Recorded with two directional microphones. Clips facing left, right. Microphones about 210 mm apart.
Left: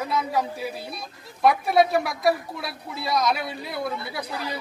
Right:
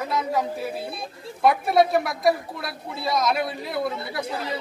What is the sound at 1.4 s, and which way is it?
Speech, centre (ahead or behind).